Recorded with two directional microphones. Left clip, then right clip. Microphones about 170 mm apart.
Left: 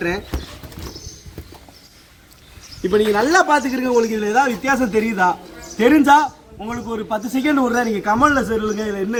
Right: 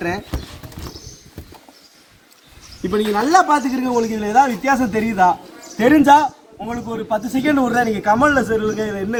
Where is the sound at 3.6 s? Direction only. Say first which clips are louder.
Left 2 dB; 45° right (ahead or behind).